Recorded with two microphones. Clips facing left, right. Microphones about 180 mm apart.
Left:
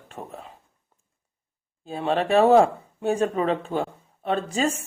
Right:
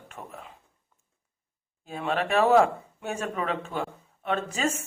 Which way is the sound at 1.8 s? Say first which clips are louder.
Left 4 dB; 30° left (ahead or behind).